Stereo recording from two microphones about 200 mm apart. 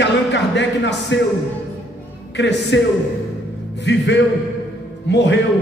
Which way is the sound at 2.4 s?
60° left (ahead or behind).